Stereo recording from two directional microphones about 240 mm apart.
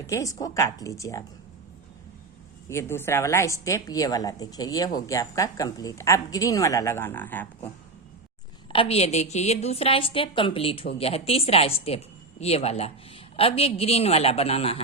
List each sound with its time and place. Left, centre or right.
0.1 s a woman's voice: centre
2.6 s a woman's voice: centre
8.7 s a woman's voice: left